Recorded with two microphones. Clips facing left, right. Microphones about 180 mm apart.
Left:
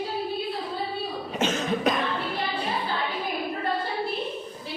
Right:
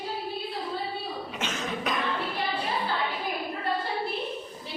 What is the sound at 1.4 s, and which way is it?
Cough, 40° left (ahead or behind).